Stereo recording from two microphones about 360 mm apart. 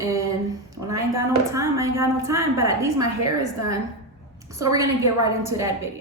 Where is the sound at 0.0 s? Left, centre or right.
Centre.